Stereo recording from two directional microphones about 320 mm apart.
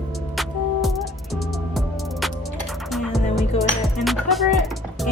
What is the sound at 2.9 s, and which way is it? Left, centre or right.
Music, centre.